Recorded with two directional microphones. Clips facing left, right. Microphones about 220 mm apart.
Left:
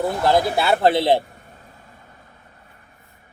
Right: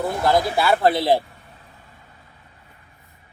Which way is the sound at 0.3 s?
25° left (ahead or behind).